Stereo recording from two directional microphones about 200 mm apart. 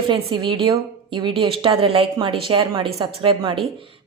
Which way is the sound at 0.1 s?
25° right (ahead or behind).